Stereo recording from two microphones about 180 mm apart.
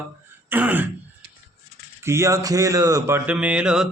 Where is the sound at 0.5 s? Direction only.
10° right (ahead or behind).